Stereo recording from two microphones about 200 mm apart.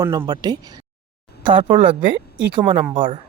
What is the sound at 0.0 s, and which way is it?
Speech, 20° right (ahead or behind).